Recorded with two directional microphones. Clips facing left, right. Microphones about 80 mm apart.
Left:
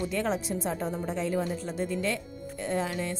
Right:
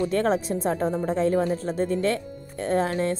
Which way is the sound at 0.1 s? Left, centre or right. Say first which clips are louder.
Right 6 dB; right.